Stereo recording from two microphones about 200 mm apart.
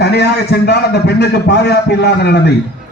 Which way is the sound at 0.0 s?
55° left (ahead or behind).